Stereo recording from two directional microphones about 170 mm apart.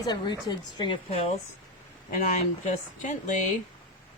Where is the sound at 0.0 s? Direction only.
25° left (ahead or behind).